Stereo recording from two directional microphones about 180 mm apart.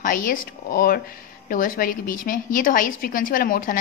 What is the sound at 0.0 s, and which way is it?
A woman's voice, 50° left (ahead or behind).